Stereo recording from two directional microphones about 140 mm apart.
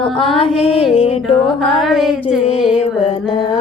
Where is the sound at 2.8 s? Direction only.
45° left (ahead or behind).